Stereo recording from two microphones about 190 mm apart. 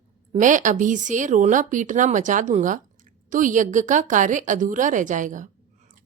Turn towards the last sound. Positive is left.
turn(degrees=-40)  # may be behind; listen again after turning